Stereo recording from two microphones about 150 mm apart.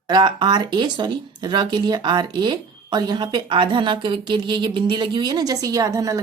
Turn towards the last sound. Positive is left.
turn(degrees=-25)  # may be behind; listen again after turning